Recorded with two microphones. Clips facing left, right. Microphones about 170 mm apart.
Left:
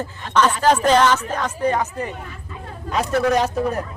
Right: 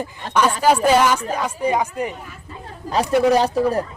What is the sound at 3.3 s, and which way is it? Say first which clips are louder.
Speech: right 3 dB; 35° right (ahead or behind).